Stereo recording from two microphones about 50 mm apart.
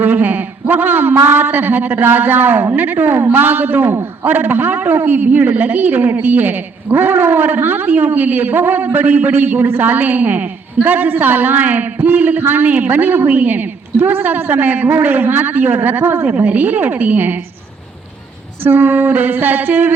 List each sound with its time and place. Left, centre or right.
0.0 s a man's voice: right
18.6 s speech: right